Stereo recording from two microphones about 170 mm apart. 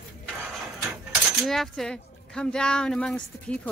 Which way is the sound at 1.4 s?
Centre (ahead or behind).